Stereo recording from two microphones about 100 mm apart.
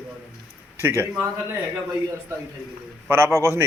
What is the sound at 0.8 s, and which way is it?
Speech, 20° right (ahead or behind).